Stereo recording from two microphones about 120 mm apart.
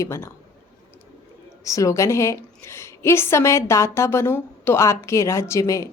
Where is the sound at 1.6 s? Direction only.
25° left (ahead or behind).